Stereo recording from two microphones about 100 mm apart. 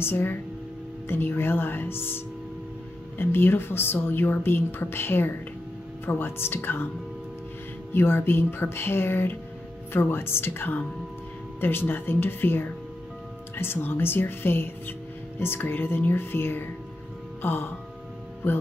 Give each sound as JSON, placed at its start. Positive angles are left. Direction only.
{"t": 0.0, "sound": "speech", "side_deg": 20}
{"t": 7.9, "sound": "speech", "side_deg": 20}
{"t": 17.4, "sound": "music", "side_deg": 20}